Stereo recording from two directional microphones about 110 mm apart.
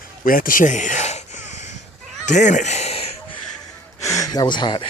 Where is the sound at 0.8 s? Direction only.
90° left.